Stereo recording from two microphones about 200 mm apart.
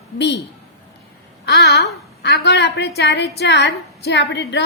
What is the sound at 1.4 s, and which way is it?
A woman's voice, 55° left (ahead or behind).